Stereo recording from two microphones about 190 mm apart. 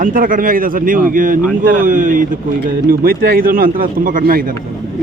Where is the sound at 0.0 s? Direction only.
45° right (ahead or behind).